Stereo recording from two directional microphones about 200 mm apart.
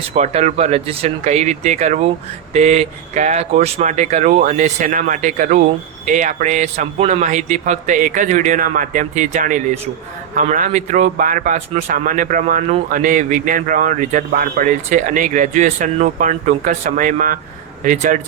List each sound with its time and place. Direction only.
0.1 s speech: 35° right (ahead or behind)